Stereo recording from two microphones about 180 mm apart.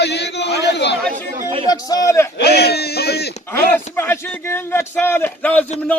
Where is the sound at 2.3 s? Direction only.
65° left (ahead or behind).